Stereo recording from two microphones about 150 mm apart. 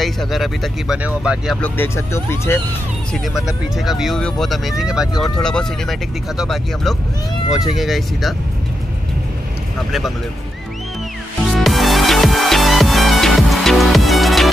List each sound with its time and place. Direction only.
0.0 s speech: centre (ahead or behind)
1.6 s speech: 15° left (ahead or behind)
3.1 s speech: centre (ahead or behind)
11.5 s music: centre (ahead or behind)